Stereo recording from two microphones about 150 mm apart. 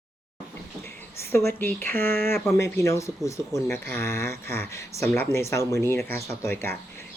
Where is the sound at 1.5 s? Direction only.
15° left (ahead or behind).